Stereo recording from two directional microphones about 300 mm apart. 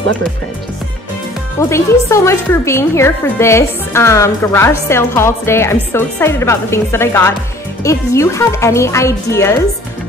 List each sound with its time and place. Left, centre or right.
1.6 s a woman's voice: centre